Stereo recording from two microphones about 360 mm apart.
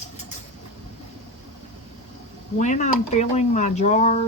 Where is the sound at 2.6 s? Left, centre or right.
Centre.